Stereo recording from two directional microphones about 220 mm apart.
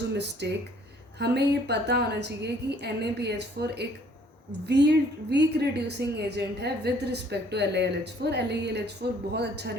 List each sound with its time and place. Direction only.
0.4 s a woman's voice: 50° right (ahead or behind)